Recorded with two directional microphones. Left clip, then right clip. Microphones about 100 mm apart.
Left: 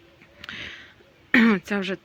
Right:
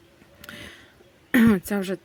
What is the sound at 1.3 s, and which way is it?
Throat clearing, 40° right (ahead or behind).